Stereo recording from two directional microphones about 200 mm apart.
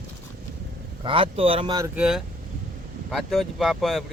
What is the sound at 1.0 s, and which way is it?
Speech, 25° right (ahead or behind).